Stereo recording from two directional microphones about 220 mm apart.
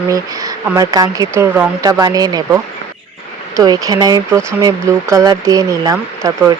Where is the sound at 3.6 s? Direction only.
15° right (ahead or behind).